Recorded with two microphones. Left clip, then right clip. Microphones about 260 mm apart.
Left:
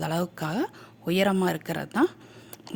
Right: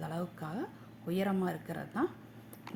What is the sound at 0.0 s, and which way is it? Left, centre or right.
Speech, left.